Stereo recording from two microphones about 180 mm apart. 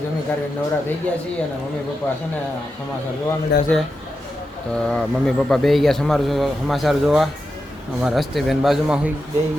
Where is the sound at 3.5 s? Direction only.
70° left (ahead or behind).